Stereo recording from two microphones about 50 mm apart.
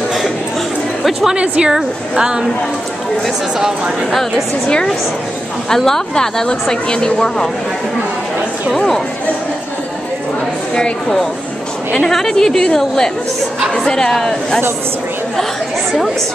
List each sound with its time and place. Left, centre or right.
1.2 s a woman's voice: centre
4.6 s a woman's voice: centre
8.7 s a woman's voice: centre
10.8 s a woman's voice: centre